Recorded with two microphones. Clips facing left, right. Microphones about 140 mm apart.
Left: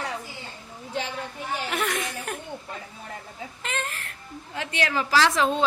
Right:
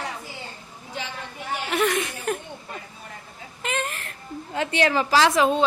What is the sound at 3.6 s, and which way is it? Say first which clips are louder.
Baby cry: right 4 dB; 5° right (ahead or behind).